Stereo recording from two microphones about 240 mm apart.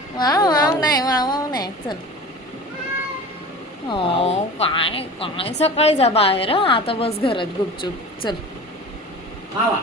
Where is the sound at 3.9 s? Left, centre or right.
Left.